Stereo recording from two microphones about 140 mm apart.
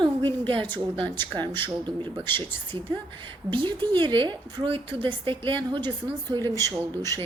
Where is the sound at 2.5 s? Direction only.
15° left (ahead or behind).